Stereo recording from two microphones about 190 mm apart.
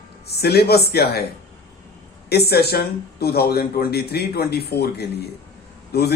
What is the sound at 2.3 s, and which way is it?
A man's voice, 55° left (ahead or behind).